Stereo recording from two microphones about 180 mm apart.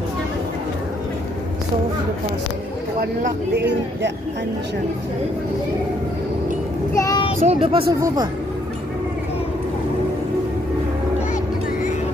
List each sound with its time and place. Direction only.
3.0 s speech: 50° right (ahead or behind)
7.0 s speech: 20° left (ahead or behind)
7.4 s speech: 30° right (ahead or behind)